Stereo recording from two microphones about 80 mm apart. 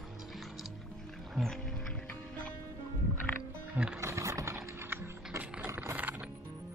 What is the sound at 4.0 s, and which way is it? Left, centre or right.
Music, right.